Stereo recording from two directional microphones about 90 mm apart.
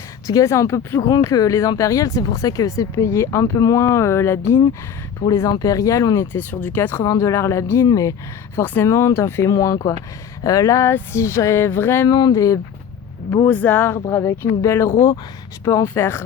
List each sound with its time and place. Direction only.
0.3 s speech: 35° left (ahead or behind)
5.5 s speech: 40° left (ahead or behind)
6.3 s speech: 20° left (ahead or behind)
7.0 s speech: 40° left (ahead or behind)
7.9 s speech: 40° left (ahead or behind)
8.5 s speech: 25° left (ahead or behind)
12.0 s speech: 45° left (ahead or behind)
13.5 s speech: 20° left (ahead or behind)